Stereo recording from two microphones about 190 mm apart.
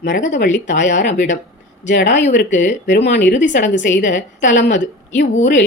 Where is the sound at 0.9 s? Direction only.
65° left (ahead or behind).